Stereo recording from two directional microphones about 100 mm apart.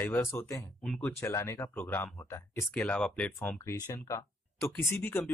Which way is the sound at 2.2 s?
35° left (ahead or behind).